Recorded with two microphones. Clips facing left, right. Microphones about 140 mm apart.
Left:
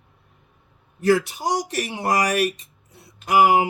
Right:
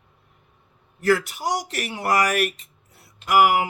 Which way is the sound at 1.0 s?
20° left (ahead or behind).